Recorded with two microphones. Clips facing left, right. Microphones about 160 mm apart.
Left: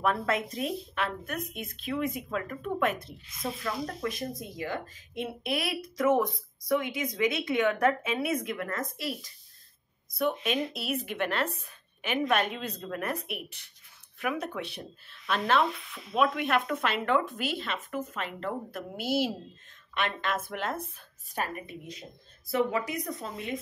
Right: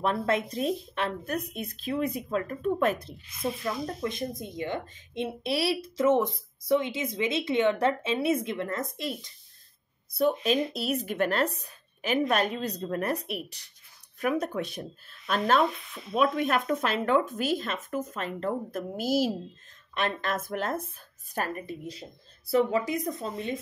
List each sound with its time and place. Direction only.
0.0 s speech: 30° right (ahead or behind)
3.6 s speech: 25° right (ahead or behind)